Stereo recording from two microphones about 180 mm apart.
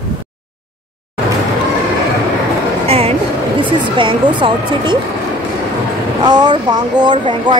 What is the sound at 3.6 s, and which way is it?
Speech, 25° right (ahead or behind).